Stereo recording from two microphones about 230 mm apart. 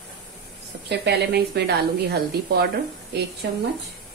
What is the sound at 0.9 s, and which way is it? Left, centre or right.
Speech, right.